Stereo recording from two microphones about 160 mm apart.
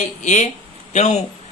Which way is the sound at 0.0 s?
45° left (ahead or behind).